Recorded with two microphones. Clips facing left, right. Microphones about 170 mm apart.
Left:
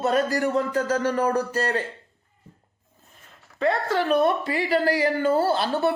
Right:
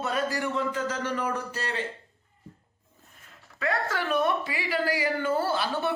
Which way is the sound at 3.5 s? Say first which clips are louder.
Left 6 dB; 35° left (ahead or behind).